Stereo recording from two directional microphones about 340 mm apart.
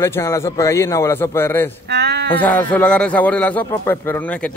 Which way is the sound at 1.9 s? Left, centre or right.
Right.